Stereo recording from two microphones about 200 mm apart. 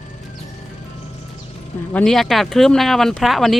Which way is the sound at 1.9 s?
Centre (ahead or behind).